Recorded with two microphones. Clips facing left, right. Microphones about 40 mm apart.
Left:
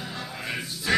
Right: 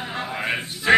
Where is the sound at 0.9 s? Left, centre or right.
Right.